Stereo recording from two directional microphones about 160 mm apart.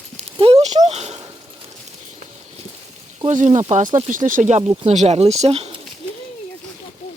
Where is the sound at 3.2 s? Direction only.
45° right (ahead or behind).